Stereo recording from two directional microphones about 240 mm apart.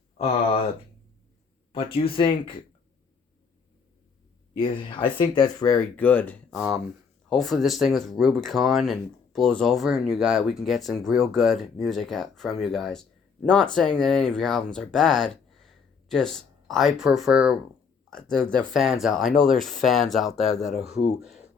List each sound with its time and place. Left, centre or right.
1.7 s speech: left
4.5 s speech: centre